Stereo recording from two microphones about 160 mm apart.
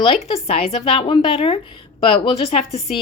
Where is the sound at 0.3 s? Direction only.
35° left (ahead or behind).